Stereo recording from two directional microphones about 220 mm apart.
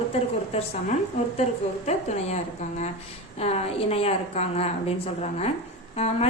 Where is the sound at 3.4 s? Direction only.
30° left (ahead or behind).